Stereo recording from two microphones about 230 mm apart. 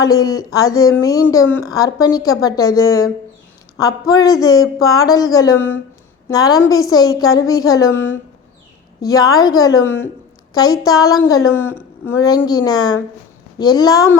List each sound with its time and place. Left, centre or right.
0.0 s a woman's voice: centre